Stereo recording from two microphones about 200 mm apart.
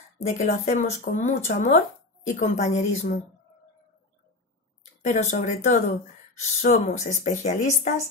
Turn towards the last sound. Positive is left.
turn(degrees=35)  # may be behind; listen again after turning